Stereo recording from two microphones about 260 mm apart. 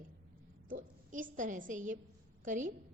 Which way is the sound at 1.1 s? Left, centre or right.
Right.